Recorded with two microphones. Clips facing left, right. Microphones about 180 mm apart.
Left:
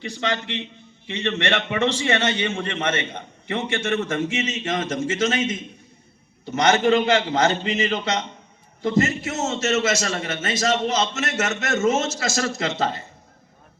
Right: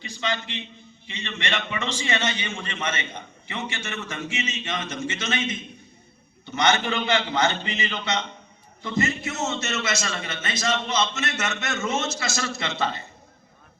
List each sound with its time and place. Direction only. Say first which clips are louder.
0.0 s a man's voice: left 3 dB; 70° left (ahead or behind); by 13.1 s 45° left (ahead or behind)